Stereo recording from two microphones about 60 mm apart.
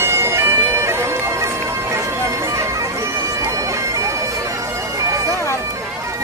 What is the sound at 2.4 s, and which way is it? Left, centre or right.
Music, right.